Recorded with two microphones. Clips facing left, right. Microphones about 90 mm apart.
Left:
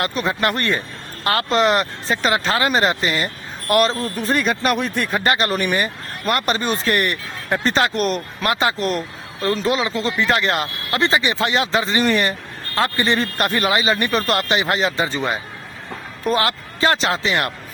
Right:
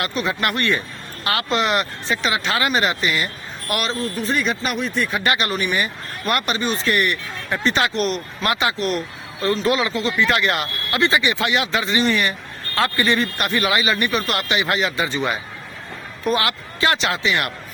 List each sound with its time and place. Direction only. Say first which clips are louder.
0.0 s speech: left 2 dB; 40° left (ahead or behind)
9.6 s speech: even; 25° left (ahead or behind); by 12.3 s 40° left (ahead or behind)
12.7 s speech: even; 30° left (ahead or behind)